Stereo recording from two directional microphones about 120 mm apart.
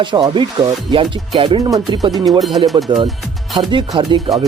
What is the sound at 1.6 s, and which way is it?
Speech, 30° right (ahead or behind).